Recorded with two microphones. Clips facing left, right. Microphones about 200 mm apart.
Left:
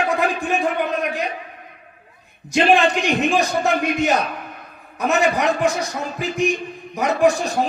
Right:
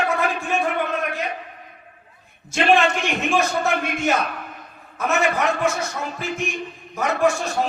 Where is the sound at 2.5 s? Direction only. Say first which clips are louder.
Left 2 dB; 15° left (ahead or behind).